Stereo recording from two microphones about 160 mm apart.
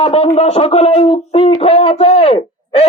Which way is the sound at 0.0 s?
40° left (ahead or behind).